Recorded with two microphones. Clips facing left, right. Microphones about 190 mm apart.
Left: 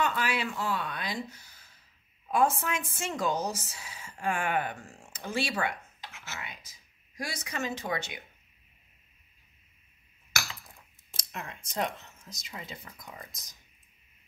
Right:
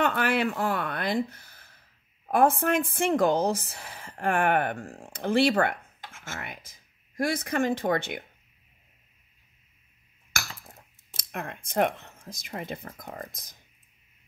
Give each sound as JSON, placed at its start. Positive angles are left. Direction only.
{"t": 0.0, "sound": "speech", "side_deg": -60}
{"t": 10.3, "sound": "speech", "side_deg": -50}